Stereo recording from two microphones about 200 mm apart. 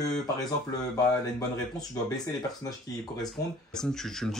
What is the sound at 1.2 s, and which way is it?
Speech, 20° left (ahead or behind).